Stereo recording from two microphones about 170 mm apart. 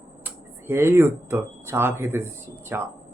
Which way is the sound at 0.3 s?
15° right (ahead or behind).